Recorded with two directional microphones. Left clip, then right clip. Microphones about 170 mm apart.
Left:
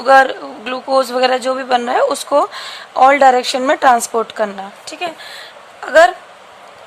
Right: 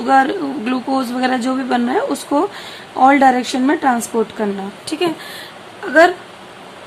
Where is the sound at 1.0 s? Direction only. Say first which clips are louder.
Left 9 dB; 20° left (ahead or behind).